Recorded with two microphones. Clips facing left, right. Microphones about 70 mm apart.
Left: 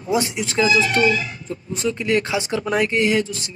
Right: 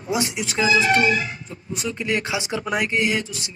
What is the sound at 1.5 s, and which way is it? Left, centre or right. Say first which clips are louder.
Speech: left 5 dB; centre.